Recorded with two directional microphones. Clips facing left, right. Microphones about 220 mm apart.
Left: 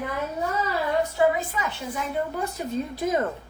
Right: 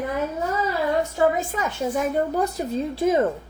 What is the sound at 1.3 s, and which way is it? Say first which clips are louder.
A woman's voice: right 4 dB; 45° right (ahead or behind).